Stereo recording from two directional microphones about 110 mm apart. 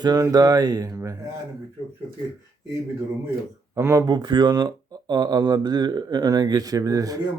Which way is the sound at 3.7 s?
25° right (ahead or behind).